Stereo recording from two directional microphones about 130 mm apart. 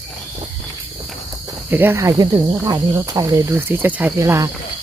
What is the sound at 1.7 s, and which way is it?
Speech, 15° right (ahead or behind).